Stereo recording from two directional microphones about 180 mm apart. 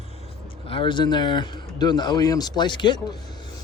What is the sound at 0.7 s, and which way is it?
Speech, 30° left (ahead or behind).